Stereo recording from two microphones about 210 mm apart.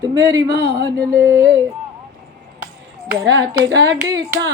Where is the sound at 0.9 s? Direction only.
50° right (ahead or behind).